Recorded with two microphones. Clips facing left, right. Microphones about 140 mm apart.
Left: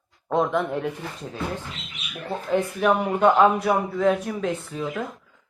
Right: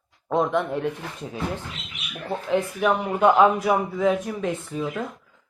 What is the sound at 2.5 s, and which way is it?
A man's voice, centre (ahead or behind).